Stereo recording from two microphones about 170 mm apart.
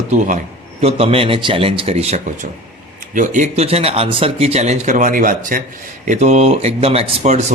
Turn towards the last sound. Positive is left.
turn(degrees=-45)  # may be behind; listen again after turning